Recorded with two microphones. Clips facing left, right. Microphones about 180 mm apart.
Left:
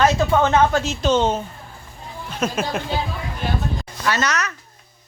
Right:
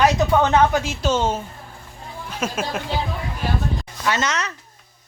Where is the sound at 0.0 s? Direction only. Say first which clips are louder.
Even; 15° right (ahead or behind).